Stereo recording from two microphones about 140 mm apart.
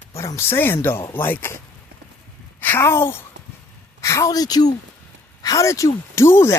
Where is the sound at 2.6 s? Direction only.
15° left (ahead or behind).